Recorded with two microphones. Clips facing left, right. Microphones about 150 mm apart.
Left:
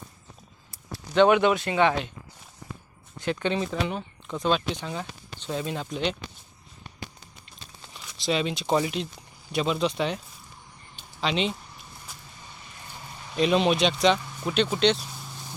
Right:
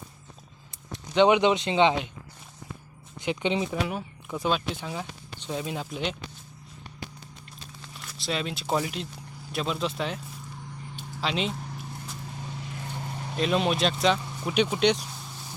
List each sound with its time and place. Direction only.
0.9 s speech: 20° right (ahead or behind)
3.2 s speech: 15° right (ahead or behind)
7.9 s speech: centre (ahead or behind)
10.9 s a sound: 5° right (ahead or behind)
12.4 s vehicle: 75° right (ahead or behind); by 13.3 s 55° right (ahead or behind)
13.3 s speech: centre (ahead or behind)